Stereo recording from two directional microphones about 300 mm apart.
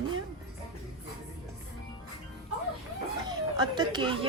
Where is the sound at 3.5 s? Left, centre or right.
Centre.